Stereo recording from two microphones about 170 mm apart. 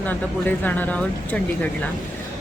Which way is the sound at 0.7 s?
10° left (ahead or behind).